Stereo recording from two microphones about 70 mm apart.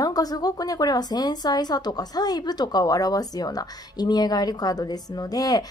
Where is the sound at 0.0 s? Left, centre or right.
Left.